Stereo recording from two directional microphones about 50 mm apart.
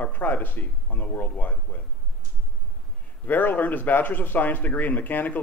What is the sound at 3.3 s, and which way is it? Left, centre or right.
A man's voice, left.